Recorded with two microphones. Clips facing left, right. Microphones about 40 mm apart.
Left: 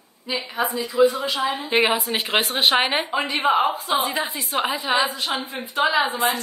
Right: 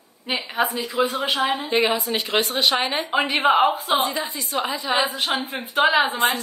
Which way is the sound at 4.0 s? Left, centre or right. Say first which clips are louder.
Even; left.